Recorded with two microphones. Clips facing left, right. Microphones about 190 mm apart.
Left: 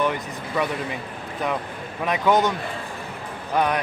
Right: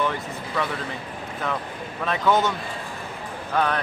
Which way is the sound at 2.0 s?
15° left (ahead or behind).